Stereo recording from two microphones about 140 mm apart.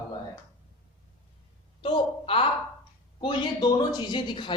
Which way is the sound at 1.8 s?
40° left (ahead or behind).